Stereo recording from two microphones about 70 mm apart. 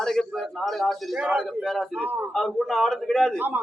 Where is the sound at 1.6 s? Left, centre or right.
Centre.